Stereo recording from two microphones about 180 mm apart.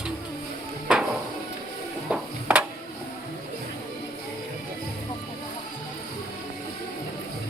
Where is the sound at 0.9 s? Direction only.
5° right (ahead or behind).